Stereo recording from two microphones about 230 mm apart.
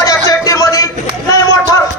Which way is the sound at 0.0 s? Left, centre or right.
Centre.